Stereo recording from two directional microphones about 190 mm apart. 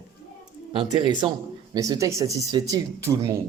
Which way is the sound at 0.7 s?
25° right (ahead or behind).